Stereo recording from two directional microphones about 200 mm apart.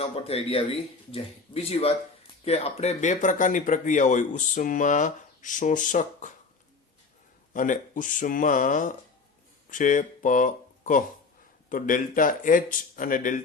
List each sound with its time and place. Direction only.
0.0 s speech: 30° left (ahead or behind)
7.5 s speech: 40° left (ahead or behind)